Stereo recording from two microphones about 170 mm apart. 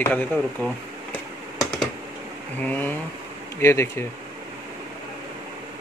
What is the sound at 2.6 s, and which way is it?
Speech, 10° left (ahead or behind).